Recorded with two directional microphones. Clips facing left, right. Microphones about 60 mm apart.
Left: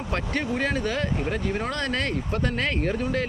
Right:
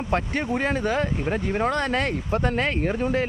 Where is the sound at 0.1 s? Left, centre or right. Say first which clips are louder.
Right 2 dB; right.